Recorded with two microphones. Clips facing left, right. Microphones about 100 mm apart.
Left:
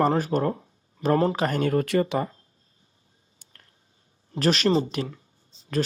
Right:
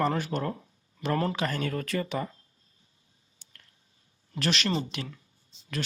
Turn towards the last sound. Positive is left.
turn(degrees=35)  # may be behind; listen again after turning